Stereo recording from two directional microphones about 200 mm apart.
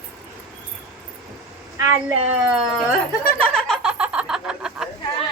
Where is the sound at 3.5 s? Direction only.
Centre (ahead or behind).